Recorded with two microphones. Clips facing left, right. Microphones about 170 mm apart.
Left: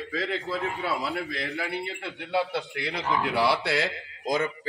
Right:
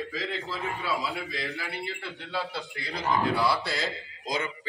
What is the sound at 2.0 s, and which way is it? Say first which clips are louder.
A man's voice: left 10 dB; 65° left (ahead or behind).